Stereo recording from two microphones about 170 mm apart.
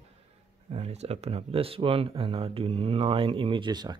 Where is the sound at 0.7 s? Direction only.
40° right (ahead or behind).